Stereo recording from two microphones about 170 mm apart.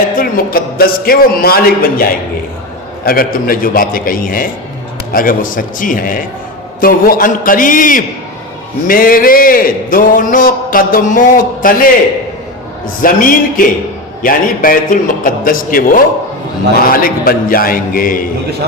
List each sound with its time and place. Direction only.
0.2 s a man's voice: 60° left (ahead or behind)
13.0 s a man's voice: 55° left (ahead or behind)